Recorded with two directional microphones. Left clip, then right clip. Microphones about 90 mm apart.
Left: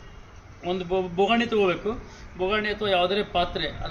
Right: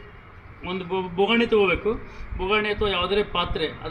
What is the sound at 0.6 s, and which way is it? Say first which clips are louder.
A man's voice: left 2 dB; 30° left (ahead or behind).